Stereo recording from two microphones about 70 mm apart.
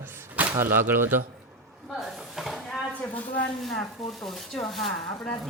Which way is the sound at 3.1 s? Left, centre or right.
Left.